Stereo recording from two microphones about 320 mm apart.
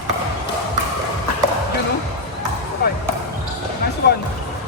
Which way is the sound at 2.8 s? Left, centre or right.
Left.